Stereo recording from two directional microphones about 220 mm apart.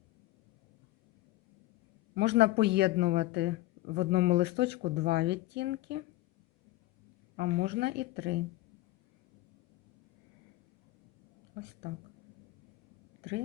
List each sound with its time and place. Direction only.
2.1 s speech: 50° right (ahead or behind)
7.3 s speech: 45° right (ahead or behind)